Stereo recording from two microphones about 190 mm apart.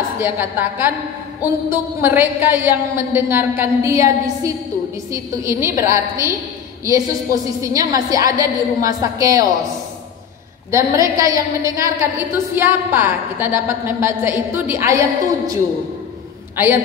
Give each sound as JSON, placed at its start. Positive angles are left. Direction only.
{"t": 0.2, "sound": "a woman's voice", "side_deg": -10}
{"t": 10.7, "sound": "a woman's voice", "side_deg": -15}